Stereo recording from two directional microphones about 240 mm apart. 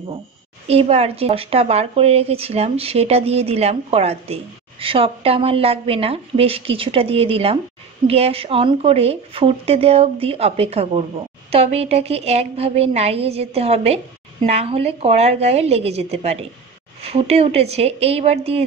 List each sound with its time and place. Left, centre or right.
0.7 s speech: right